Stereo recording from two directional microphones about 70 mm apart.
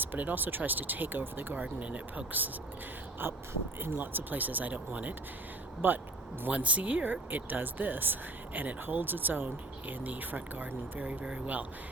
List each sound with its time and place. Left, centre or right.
0.0 s speech: right
1.6 s speech: centre
3.8 s speech: right